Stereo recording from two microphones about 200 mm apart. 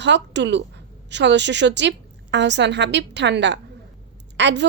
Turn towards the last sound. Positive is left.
turn(degrees=-60)  # may be behind; listen again after turning